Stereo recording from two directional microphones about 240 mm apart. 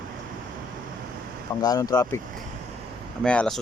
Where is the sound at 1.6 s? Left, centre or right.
Centre.